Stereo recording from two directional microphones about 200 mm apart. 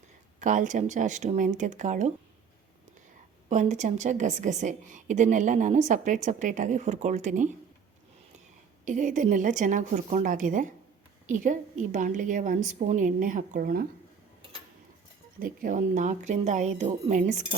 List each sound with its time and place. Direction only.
0.3 s a woman's voice: 40° right (ahead or behind)
3.5 s a woman's voice: 35° right (ahead or behind)
8.8 s a woman's voice: 40° right (ahead or behind)
15.4 s a woman's voice: 45° right (ahead or behind)